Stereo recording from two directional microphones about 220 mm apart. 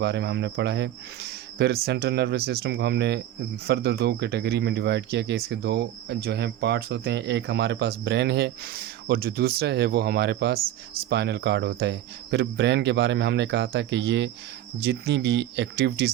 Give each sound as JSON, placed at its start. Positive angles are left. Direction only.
{"t": 0.0, "sound": "speech", "side_deg": -50}